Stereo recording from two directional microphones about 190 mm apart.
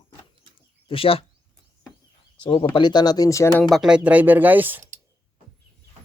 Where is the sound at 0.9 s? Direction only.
30° left (ahead or behind).